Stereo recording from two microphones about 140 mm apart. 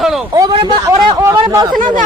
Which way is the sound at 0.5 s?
35° right (ahead or behind).